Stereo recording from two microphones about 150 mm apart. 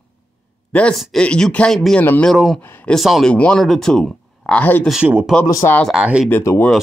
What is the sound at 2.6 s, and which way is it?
Speech, 10° left (ahead or behind).